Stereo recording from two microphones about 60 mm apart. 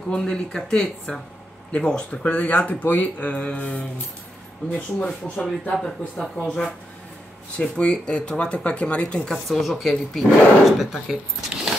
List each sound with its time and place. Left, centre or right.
0.1 s speech: centre
5.0 s speech: centre
5.8 s speech: centre
7.5 s speech: centre
9.3 s speech: centre